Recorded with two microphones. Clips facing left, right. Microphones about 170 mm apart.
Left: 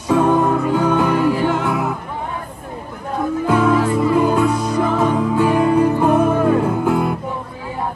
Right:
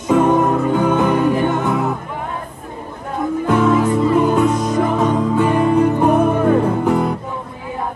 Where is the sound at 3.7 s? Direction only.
20° right (ahead or behind).